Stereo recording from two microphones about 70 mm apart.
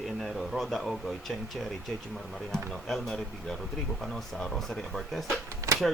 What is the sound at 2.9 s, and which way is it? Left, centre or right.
Speech, centre.